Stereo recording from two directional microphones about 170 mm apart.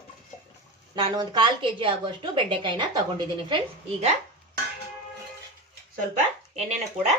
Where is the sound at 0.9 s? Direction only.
30° right (ahead or behind).